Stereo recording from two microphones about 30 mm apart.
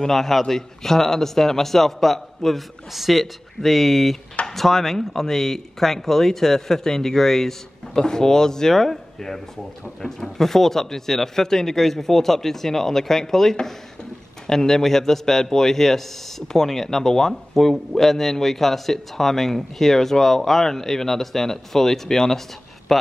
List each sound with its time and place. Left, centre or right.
0.1 s a man's voice: centre
10.0 s a man's voice: centre
22.9 s a sound: centre